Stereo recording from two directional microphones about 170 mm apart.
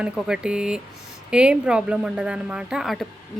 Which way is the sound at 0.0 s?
5° right (ahead or behind).